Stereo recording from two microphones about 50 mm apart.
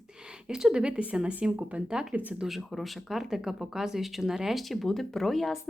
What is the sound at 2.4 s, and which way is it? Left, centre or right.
Speech, centre.